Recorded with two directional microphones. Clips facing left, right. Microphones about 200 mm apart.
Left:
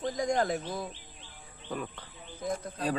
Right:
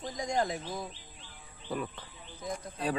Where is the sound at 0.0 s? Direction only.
60° left (ahead or behind).